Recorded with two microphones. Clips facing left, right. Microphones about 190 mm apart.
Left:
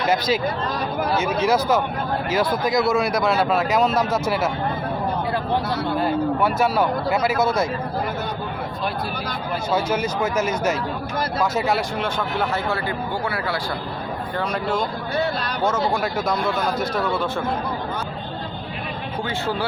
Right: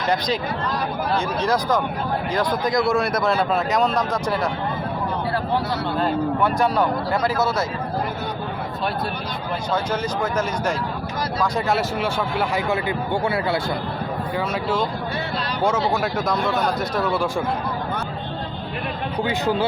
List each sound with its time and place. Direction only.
1.1 s a man's voice: 5° left (ahead or behind)
6.0 s a man's voice: 5° left (ahead or behind)
9.7 s a man's voice: 10° left (ahead or behind); by 12.5 s 5° right (ahead or behind)
13.2 s speech: 25° right (ahead or behind)
14.3 s a man's voice: 5° right (ahead or behind)
19.2 s speech: 20° right (ahead or behind)